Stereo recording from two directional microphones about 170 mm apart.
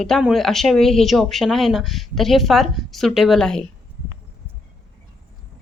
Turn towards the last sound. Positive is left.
turn(degrees=5)  # may be behind; listen again after turning